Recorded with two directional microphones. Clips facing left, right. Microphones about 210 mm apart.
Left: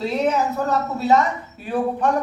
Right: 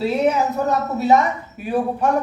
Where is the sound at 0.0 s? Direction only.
10° right (ahead or behind).